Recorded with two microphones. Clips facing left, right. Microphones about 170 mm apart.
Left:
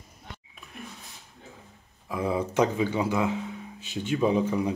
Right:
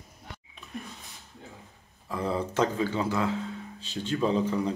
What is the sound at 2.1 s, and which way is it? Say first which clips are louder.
Speech: left 2 dB; 10° left (ahead or behind).